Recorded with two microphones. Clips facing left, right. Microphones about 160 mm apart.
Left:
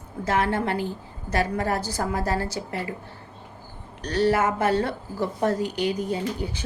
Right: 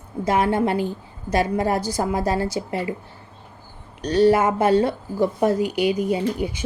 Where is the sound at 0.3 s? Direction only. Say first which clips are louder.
Right 4 dB; 15° right (ahead or behind).